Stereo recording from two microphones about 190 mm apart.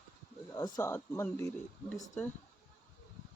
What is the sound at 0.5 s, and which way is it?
Speech, 20° left (ahead or behind).